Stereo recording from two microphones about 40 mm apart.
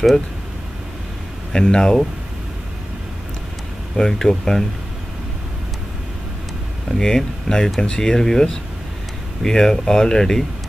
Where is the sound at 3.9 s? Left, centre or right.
Centre.